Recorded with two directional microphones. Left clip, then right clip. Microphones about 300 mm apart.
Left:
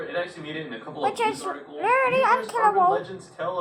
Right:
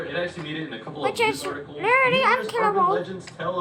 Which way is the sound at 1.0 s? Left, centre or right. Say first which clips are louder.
Right 1 dB; centre.